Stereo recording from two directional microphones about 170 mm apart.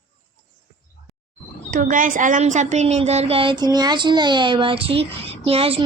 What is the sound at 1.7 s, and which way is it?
Speech, 50° right (ahead or behind).